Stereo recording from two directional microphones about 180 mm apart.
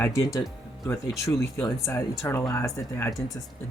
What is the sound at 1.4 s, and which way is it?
Speech, 15° left (ahead or behind).